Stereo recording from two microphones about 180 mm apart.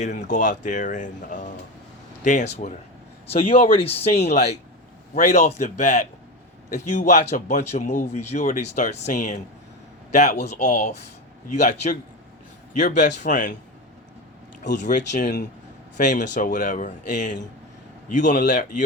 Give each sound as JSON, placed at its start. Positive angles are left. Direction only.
{"t": 0.0, "sound": "a man's voice", "side_deg": 40}
{"t": 14.8, "sound": "speech", "side_deg": 45}